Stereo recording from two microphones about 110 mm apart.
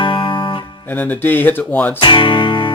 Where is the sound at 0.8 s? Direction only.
15° left (ahead or behind).